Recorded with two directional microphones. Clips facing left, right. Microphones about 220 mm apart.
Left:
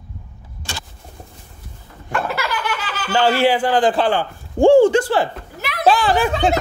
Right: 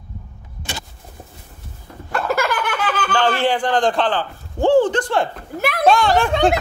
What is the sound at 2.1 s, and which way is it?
Laughter, 45° right (ahead or behind).